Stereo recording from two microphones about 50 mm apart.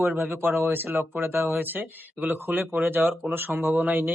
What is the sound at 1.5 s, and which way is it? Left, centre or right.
A man's voice, right.